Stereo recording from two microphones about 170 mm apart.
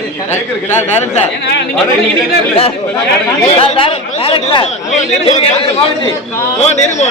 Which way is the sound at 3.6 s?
30° left (ahead or behind).